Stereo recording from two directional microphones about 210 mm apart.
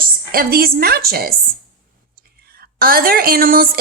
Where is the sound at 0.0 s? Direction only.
45° right (ahead or behind).